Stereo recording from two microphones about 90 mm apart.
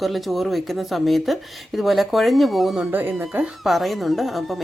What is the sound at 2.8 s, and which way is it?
Speech, 20° right (ahead or behind).